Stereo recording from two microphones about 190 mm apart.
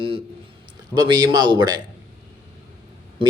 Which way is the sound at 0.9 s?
25° right (ahead or behind).